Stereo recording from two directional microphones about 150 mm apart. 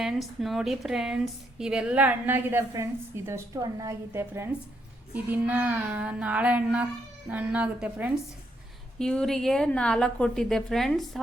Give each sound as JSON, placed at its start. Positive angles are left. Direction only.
{"t": 0.0, "sound": "a woman's voice", "side_deg": 0}
{"t": 9.0, "sound": "a woman's voice", "side_deg": 5}